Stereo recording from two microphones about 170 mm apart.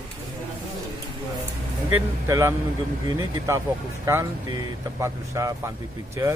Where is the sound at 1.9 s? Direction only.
15° right (ahead or behind).